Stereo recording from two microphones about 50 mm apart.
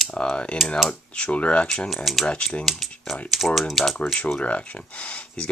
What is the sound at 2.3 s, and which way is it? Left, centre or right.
Speech, left.